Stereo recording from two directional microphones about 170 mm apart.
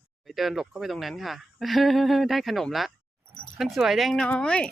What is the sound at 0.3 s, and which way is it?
Speech, centre (ahead or behind).